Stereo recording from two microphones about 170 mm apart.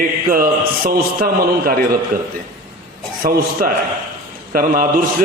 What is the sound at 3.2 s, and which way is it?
A man's voice, 55° right (ahead or behind).